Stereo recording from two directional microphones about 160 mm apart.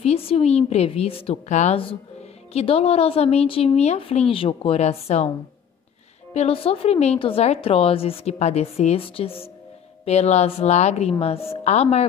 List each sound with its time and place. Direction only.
0.0 s a woman's voice: 40° left (ahead or behind)
6.3 s a woman's voice: 40° left (ahead or behind)